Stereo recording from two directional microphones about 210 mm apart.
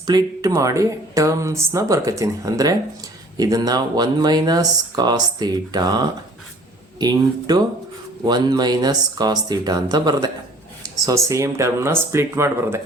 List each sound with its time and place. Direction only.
0.0 s speech: 20° right (ahead or behind)